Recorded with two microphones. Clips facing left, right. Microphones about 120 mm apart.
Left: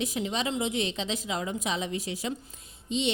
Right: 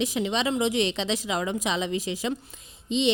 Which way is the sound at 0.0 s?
90° right.